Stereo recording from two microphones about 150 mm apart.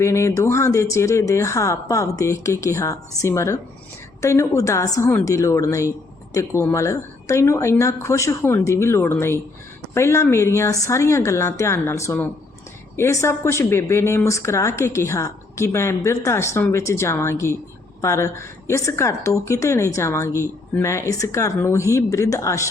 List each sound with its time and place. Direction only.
0.0 s a woman's voice: 20° left (ahead or behind)